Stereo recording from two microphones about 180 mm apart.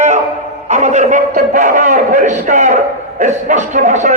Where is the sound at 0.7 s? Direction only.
40° right (ahead or behind).